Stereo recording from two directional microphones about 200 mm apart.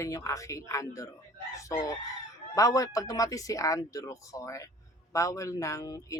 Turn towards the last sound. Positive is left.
turn(degrees=15)  # may be behind; listen again after turning